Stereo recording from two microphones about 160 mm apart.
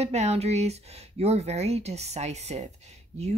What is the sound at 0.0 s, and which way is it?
Speech, 40° right (ahead or behind).